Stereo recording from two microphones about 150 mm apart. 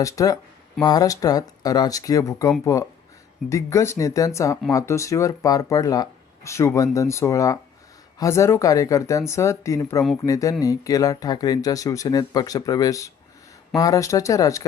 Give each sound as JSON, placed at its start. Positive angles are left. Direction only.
{"t": 0.0, "sound": "speech", "side_deg": 20}